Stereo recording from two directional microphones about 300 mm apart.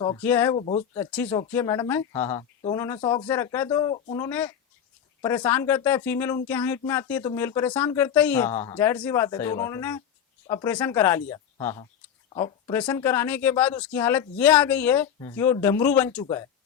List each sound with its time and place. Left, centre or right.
0.0 s speech: centre
0.6 s speech: left
0.9 s speech: centre